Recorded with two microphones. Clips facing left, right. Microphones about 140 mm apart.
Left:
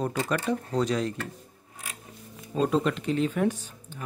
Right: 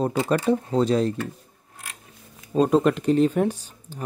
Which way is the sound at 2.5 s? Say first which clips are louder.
Right 6 dB; 45° right (ahead or behind).